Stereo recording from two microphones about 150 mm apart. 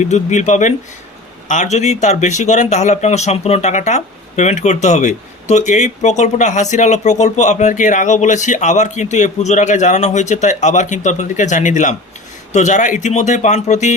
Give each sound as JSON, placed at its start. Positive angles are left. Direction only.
{"t": 0.0, "sound": "speech", "side_deg": 50}